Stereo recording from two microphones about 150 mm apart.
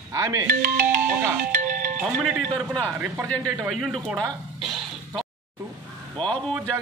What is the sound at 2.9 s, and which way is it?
Speech, 10° right (ahead or behind).